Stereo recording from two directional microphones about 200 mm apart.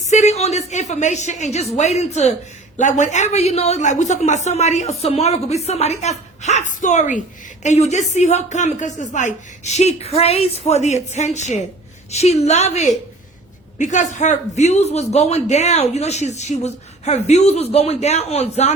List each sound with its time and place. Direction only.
0.1 s a woman's voice: 35° left (ahead or behind)